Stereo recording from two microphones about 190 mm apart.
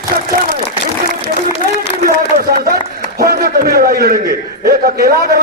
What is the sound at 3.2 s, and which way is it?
A man's voice, 50° right (ahead or behind).